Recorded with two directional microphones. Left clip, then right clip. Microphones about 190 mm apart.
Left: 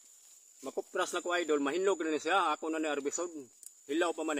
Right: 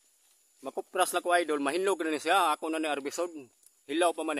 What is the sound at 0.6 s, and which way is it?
Speech, 55° right (ahead or behind).